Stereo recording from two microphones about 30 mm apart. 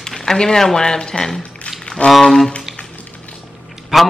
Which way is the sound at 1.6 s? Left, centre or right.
Left.